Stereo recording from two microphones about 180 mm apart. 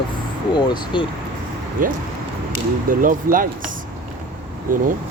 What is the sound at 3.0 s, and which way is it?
Speech, 50° right (ahead or behind).